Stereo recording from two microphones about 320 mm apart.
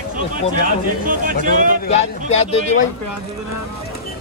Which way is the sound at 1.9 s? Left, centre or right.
Left.